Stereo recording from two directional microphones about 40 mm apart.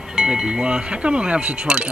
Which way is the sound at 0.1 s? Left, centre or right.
Centre.